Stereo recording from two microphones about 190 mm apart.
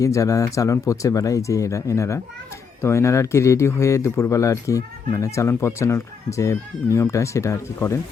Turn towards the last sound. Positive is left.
turn(degrees=15)  # may be behind; listen again after turning